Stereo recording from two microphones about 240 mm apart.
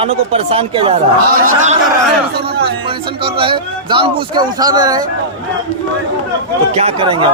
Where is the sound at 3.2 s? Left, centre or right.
Right.